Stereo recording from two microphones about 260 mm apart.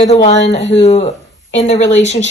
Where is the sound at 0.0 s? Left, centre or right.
Left.